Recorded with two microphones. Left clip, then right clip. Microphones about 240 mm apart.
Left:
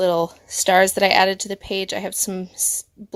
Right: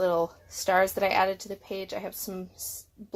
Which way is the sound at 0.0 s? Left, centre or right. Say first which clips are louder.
Left 7 dB; left.